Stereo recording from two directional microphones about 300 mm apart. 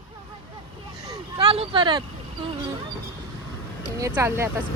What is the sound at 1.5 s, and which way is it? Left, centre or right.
Vehicle, centre.